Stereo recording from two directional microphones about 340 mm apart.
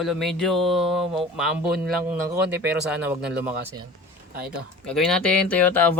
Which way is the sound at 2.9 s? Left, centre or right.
Centre.